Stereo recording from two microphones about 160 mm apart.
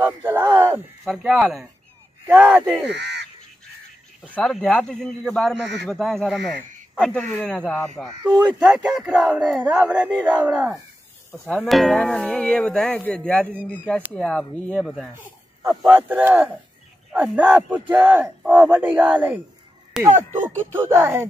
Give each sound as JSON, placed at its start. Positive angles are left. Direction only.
{"t": 0.0, "sound": "speech", "side_deg": -15}
{"t": 1.0, "sound": "speech", "side_deg": -5}
{"t": 2.9, "sound": "speech", "side_deg": -90}
{"t": 4.3, "sound": "speech", "side_deg": 5}
{"t": 8.3, "sound": "speech", "side_deg": -10}
{"t": 15.9, "sound": "speech", "side_deg": -10}
{"t": 20.1, "sound": "speech", "side_deg": -50}
{"t": 20.3, "sound": "speech", "side_deg": -15}